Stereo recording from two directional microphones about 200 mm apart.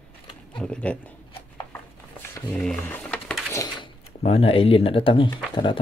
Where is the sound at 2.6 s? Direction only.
5° left (ahead or behind).